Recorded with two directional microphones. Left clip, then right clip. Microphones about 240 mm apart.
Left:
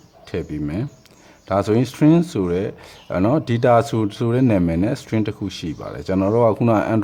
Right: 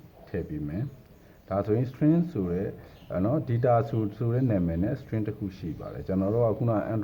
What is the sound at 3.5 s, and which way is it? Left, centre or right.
Speech, left.